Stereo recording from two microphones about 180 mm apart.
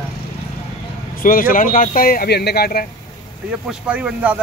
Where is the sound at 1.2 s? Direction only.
50° left (ahead or behind).